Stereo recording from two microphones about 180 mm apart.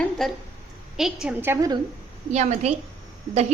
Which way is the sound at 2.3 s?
40° right (ahead or behind).